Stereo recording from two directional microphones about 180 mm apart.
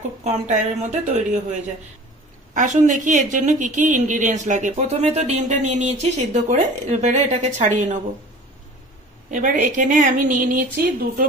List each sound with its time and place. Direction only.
0.2 s speech: 40° right (ahead or behind)
2.5 s a woman's voice: 45° right (ahead or behind)
9.3 s a woman's voice: 45° right (ahead or behind)